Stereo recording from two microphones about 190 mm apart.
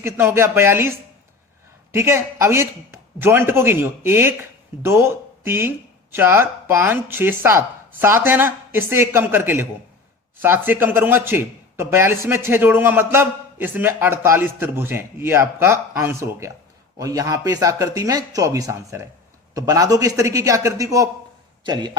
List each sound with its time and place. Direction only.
0.0 s a man's voice: 15° right (ahead or behind)